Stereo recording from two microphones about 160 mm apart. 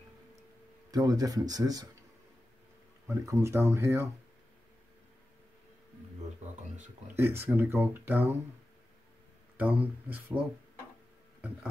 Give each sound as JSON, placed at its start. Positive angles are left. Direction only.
{"t": 0.9, "sound": "speech", "side_deg": -20}
{"t": 3.1, "sound": "speech", "side_deg": -20}
{"t": 7.2, "sound": "speech", "side_deg": -15}
{"t": 9.6, "sound": "speech", "side_deg": -10}